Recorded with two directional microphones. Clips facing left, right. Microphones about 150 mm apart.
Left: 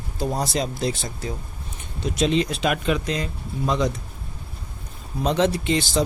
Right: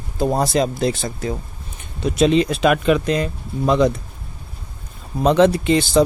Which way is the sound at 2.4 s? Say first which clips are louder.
Right 7 dB; 65° right (ahead or behind).